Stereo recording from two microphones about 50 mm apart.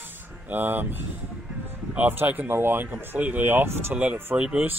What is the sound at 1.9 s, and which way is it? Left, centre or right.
Speech, right.